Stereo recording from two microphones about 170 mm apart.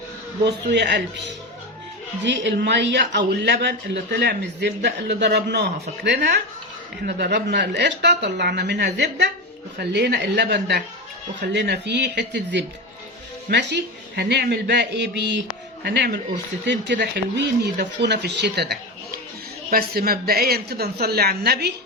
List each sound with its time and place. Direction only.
0.4 s a man's voice: 90° right
2.2 s a man's voice: 90° right; by 10.8 s 70° right (ahead or behind)
11.5 s a man's voice: 80° right
15.8 s a woman's voice: 75° right (ahead or behind)
16.6 s speech: 90° right; by 18.8 s 75° right (ahead or behind)
19.7 s a woman's voice: 60° right (ahead or behind)